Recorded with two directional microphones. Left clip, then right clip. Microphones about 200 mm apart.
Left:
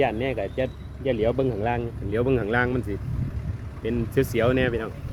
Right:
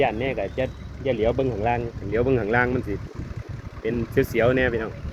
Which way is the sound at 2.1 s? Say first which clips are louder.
Right 2 dB; 10° left (ahead or behind).